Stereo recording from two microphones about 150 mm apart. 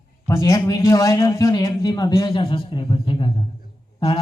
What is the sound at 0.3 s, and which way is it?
A man's voice, 20° left (ahead or behind).